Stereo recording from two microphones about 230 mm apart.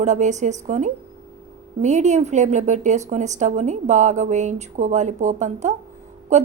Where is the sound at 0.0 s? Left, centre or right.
Right.